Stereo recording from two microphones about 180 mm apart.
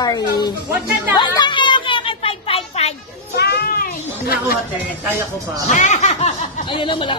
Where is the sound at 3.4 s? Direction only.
65° left (ahead or behind).